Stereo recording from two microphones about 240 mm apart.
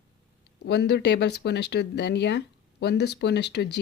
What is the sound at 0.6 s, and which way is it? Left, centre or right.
Speech, left.